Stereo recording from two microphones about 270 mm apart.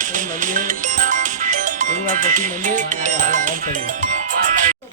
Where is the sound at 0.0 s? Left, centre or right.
Right.